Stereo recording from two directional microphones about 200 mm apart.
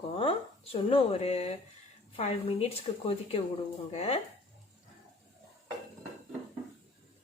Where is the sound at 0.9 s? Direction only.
30° left (ahead or behind).